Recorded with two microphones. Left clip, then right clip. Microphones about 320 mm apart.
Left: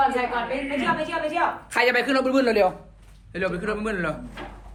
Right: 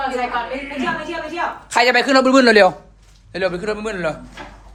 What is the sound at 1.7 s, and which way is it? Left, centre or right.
Speech, centre.